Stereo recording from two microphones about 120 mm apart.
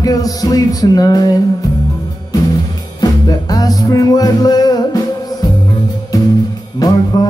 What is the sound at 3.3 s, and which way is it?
Music, 30° left (ahead or behind).